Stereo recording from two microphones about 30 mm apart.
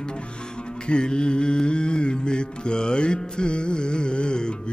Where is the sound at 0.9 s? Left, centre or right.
Left.